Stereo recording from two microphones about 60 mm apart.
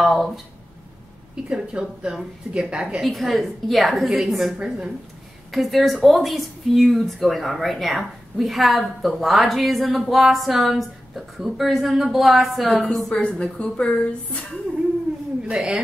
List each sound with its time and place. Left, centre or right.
0.0 s a sound: centre
1.3 s a woman's voice: centre
4.6 s a woman's voice: centre
5.5 s a woman's voice: centre
13.1 s a woman's voice: left
15.5 s a woman's voice: centre